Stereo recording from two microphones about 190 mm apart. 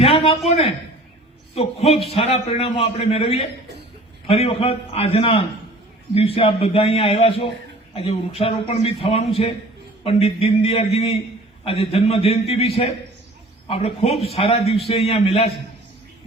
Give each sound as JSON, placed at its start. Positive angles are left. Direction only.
{"t": 0.0, "sound": "a man's voice", "side_deg": 30}